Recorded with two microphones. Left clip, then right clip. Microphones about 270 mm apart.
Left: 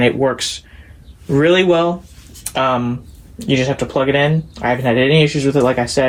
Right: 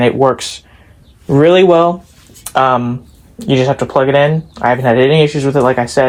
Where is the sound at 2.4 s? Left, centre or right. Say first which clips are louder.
Right 5 dB; right.